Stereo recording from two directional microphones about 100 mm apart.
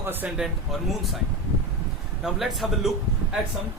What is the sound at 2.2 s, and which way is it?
Speech, centre (ahead or behind).